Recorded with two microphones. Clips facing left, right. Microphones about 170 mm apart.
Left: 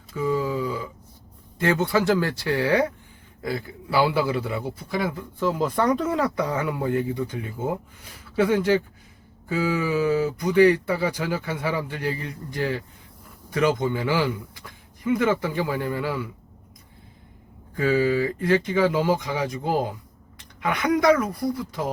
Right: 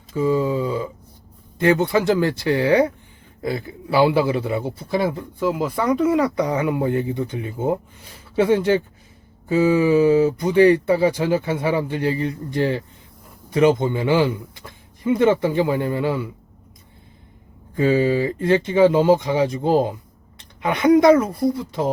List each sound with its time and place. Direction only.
0.1 s speech: 25° right (ahead or behind)
5.4 s speech: 10° right (ahead or behind)
17.7 s speech: 25° right (ahead or behind)